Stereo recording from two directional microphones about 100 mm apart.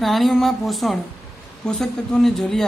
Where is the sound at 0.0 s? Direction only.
Centre (ahead or behind).